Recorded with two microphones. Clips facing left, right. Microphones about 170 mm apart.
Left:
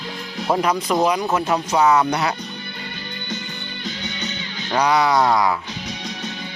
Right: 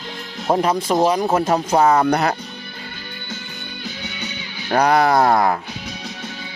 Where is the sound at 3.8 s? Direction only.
10° right (ahead or behind).